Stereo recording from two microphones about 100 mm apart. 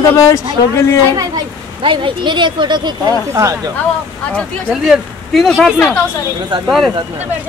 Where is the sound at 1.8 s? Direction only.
55° right (ahead or behind).